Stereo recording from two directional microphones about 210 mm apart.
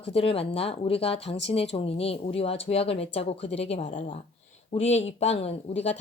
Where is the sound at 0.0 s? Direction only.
25° left (ahead or behind).